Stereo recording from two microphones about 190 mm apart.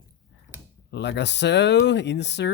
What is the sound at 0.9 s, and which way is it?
Speech, 65° left (ahead or behind).